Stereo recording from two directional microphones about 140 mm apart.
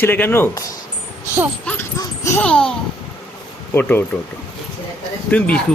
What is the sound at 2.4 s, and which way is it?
Speech, 5° left (ahead or behind).